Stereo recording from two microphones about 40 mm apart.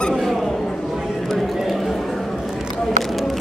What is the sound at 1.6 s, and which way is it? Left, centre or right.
Chatter, centre.